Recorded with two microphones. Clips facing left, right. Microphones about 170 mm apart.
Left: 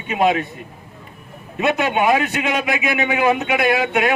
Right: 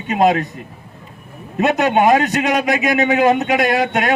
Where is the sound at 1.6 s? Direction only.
45° right (ahead or behind).